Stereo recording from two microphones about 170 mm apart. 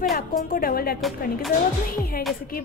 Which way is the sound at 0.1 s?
60° left (ahead or behind).